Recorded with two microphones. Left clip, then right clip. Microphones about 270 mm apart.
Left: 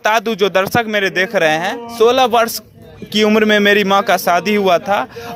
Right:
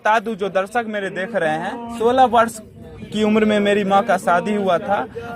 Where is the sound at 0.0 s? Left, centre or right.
Left.